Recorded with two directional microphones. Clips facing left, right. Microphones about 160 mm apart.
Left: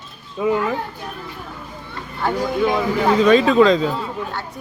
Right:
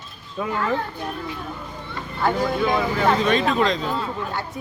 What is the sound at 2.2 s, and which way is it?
Speech, 5° left (ahead or behind).